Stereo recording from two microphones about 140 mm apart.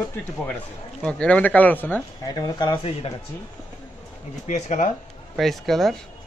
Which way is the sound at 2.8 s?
40° left (ahead or behind).